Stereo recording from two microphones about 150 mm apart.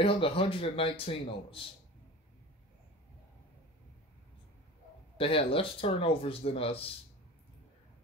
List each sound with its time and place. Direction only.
0.0 s speech: 40° left (ahead or behind)
5.1 s speech: 40° left (ahead or behind)